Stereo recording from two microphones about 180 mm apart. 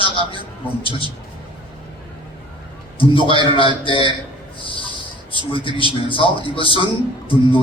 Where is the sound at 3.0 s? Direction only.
30° left (ahead or behind).